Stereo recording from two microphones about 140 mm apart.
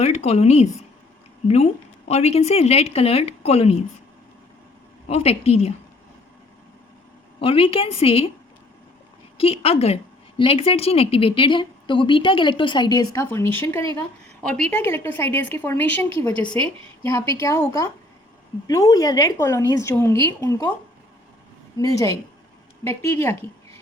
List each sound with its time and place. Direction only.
0.0 s a woman's voice: 50° left (ahead or behind)
5.0 s a woman's voice: 45° left (ahead or behind)
7.3 s a woman's voice: 40° left (ahead or behind)
9.4 s a woman's voice: 45° left (ahead or behind)
13.1 s a woman's voice: 20° left (ahead or behind)
14.4 s a woman's voice: 5° left (ahead or behind); by 20.7 s 20° left (ahead or behind)
21.8 s a woman's voice: 25° left (ahead or behind)